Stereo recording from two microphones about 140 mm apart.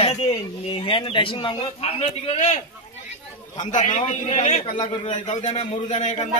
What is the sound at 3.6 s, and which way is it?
A man's voice, 60° left (ahead or behind).